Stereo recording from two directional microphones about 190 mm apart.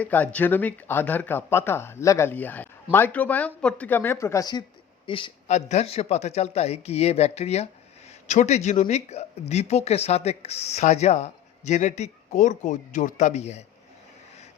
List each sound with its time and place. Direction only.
0.0 s speech: 10° left (ahead or behind); by 13.7 s 35° left (ahead or behind)